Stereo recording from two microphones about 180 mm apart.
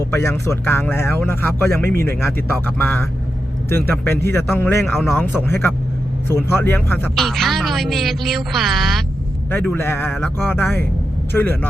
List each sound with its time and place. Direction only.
0.0 s a man's voice: 15° left (ahead or behind)
9.5 s speech: 10° left (ahead or behind)